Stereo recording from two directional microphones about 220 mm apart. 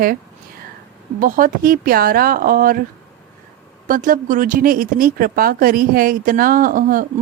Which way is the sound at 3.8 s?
40° right (ahead or behind).